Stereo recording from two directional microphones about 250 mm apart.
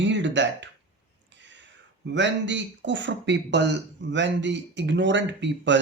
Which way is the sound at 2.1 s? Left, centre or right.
Right.